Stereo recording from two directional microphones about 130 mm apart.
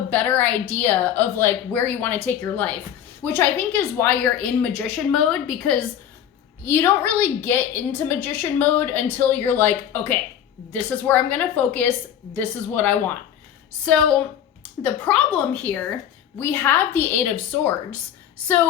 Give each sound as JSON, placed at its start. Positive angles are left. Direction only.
{"t": 0.1, "sound": "a woman's voice", "side_deg": 10}